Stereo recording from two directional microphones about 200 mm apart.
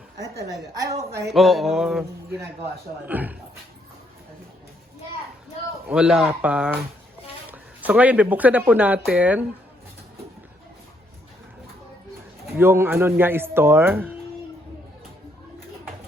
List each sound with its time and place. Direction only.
0.7 s speech: 15° right (ahead or behind)
1.3 s speech: centre (ahead or behind)
3.1 s speech: 10° right (ahead or behind)
5.9 s speech: 5° right (ahead or behind)
12.5 s speech: 10° right (ahead or behind)